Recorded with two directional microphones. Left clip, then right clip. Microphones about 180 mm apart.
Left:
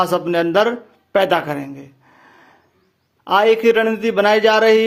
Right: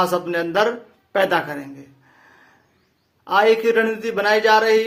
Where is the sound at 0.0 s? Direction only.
35° left (ahead or behind).